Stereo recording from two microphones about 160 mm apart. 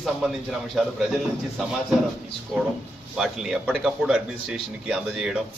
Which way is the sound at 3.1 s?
5° right (ahead or behind).